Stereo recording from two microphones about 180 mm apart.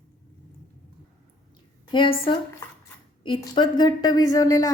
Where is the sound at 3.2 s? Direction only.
25° left (ahead or behind).